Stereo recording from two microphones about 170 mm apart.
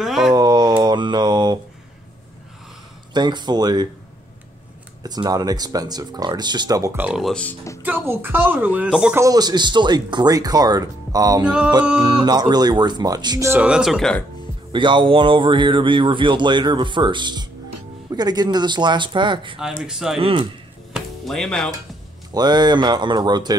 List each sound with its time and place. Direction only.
0.0 s speech: centre (ahead or behind)
0.3 s mantra: 25° right (ahead or behind)
3.1 s speech: 25° right (ahead or behind)
5.0 s speech: 25° right (ahead or behind); by 7.5 s 5° left (ahead or behind)
7.8 s speech: 10° right (ahead or behind)
9.2 s speech: 25° right (ahead or behind)
13.5 s speech: 5° right (ahead or behind)
14.7 s speech: 30° right (ahead or behind)
19.6 s speech: 5° right (ahead or behind)
20.2 s speech: 35° right (ahead or behind)
20.9 s music: centre (ahead or behind)
22.3 s speech: 25° right (ahead or behind)